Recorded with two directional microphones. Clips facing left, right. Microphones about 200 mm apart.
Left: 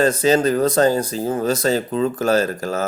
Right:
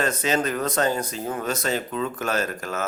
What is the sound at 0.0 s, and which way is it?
A man's voice, 30° left (ahead or behind).